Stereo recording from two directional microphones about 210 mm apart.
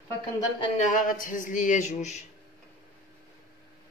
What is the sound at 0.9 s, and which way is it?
Speech, 40° left (ahead or behind).